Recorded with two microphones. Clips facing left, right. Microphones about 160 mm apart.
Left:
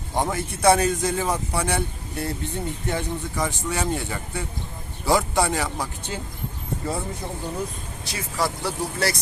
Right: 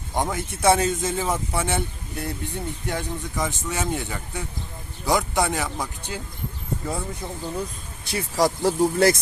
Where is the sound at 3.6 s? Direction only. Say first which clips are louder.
Left 1 dB; centre (ahead or behind).